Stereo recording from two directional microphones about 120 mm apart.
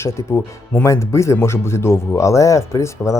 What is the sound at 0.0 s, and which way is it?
Speech, 25° left (ahead or behind).